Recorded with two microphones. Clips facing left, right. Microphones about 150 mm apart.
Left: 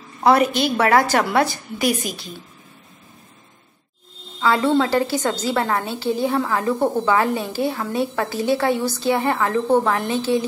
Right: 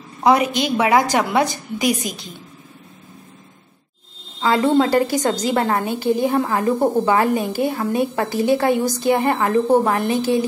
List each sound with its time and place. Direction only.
0.2 s a woman's voice: 15° right (ahead or behind)
4.4 s a woman's voice: 15° right (ahead or behind)